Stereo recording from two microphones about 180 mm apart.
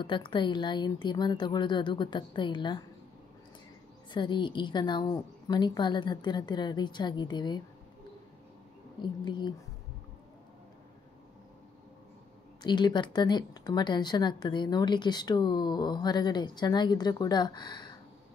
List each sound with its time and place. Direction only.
0.0 s a woman's voice: 25° left (ahead or behind)
4.1 s a woman's voice: 25° left (ahead or behind)
9.2 s a woman's voice: 25° left (ahead or behind)
12.6 s a woman's voice: 25° left (ahead or behind)